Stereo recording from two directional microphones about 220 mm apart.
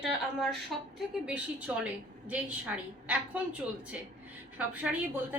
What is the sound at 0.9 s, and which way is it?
A woman's voice, 5° right (ahead or behind).